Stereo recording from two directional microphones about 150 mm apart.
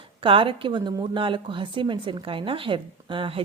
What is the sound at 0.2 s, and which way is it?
A woman's voice, 35° right (ahead or behind).